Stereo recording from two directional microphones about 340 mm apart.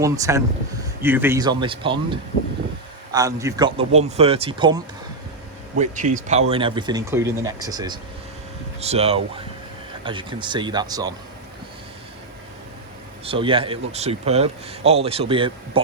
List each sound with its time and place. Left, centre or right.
0.0 s speech: centre
13.2 s speech: centre